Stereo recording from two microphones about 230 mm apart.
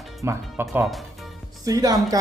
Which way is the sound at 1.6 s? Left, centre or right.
Centre.